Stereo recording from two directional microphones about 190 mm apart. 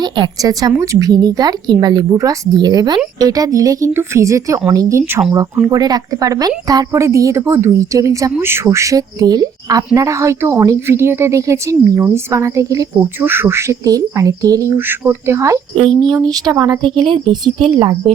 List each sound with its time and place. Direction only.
0.0 s speech: 20° right (ahead or behind)
15.8 s speech: 25° right (ahead or behind)